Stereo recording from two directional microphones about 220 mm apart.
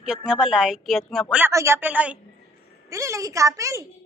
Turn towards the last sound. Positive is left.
turn(degrees=-15)  # may be behind; listen again after turning